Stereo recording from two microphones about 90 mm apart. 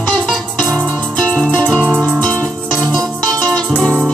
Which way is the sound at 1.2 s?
15° left (ahead or behind).